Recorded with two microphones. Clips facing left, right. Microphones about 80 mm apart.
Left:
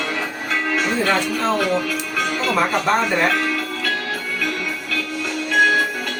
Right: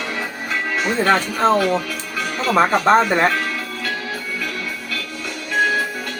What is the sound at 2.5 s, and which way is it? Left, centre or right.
Speech, right.